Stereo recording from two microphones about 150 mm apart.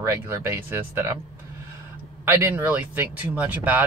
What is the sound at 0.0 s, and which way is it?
Speech, 15° right (ahead or behind).